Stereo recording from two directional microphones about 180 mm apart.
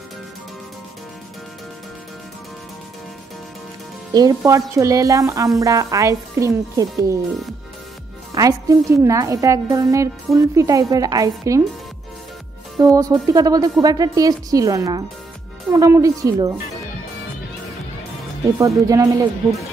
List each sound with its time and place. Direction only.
4.1 s a woman's voice: 20° right (ahead or behind)
8.4 s a woman's voice: 20° right (ahead or behind)
12.7 s a woman's voice: 20° right (ahead or behind)
18.6 s a woman's voice: 20° right (ahead or behind)